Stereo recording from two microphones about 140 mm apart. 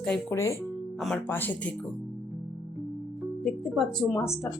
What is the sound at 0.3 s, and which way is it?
Speech, 20° left (ahead or behind).